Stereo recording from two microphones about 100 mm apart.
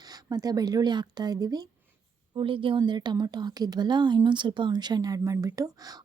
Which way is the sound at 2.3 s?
60° right (ahead or behind).